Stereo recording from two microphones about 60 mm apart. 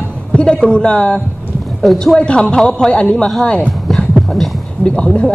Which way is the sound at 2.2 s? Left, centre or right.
Centre.